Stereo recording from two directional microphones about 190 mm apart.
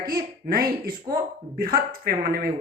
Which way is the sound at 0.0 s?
50° right (ahead or behind).